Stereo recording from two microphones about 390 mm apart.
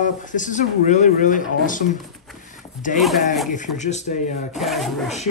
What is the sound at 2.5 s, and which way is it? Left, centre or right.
Zipper, centre.